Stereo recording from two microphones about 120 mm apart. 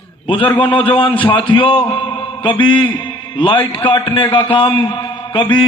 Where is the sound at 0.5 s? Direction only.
50° left (ahead or behind).